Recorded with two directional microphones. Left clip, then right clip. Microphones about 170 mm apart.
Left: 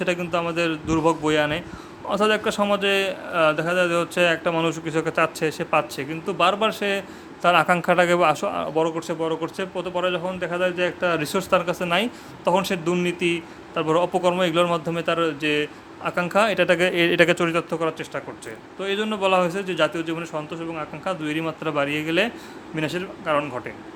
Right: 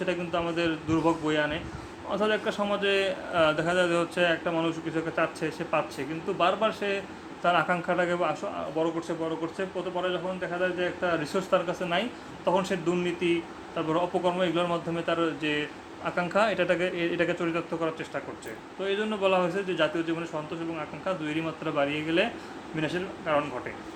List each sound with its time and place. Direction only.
0.0 s a man's voice: 40° left (ahead or behind)